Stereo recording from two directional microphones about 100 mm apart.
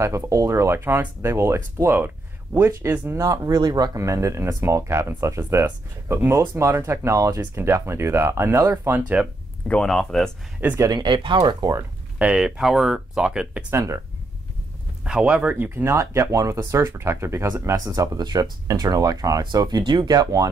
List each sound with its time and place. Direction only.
0.0 s speech: 30° right (ahead or behind)
3.2 s speech: 35° right (ahead or behind)
8.9 s speech: 15° right (ahead or behind)
9.7 s speech: 5° left (ahead or behind)
10.6 s speech: 15° right (ahead or behind)
11.0 s speech: 50° right (ahead or behind)
12.2 s speech: 10° right (ahead or behind)
13.7 s speech: 30° right (ahead or behind)
15.0 s speech: 10° right (ahead or behind)
15.8 s speech: 30° right (ahead or behind)
17.7 s speech: 35° right (ahead or behind)